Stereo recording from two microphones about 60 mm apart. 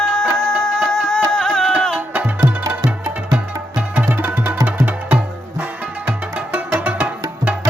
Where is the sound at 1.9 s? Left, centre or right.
Right.